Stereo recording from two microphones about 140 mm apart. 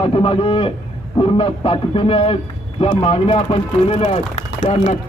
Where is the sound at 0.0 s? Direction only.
40° left (ahead or behind).